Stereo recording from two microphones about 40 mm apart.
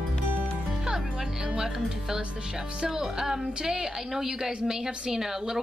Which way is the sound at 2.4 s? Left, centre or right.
Centre.